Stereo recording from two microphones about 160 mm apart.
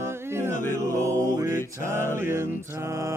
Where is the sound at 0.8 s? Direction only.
20° right (ahead or behind).